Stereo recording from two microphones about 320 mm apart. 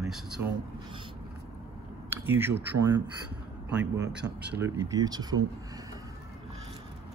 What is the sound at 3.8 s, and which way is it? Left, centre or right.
Speech, right.